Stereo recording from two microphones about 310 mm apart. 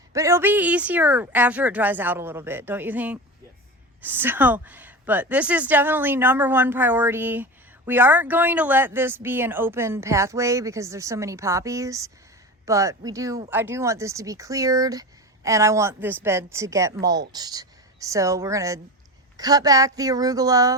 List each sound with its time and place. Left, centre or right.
0.1 s speech: centre